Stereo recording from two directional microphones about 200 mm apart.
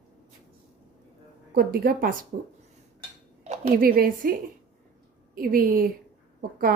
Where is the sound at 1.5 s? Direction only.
50° right (ahead or behind).